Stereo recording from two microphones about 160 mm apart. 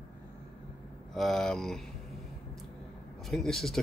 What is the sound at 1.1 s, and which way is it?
Speech, centre (ahead or behind).